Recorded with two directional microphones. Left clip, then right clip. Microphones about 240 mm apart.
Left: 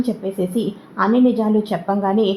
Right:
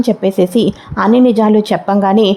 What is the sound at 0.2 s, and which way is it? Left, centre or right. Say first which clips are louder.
A woman's voice: right 10 dB; right.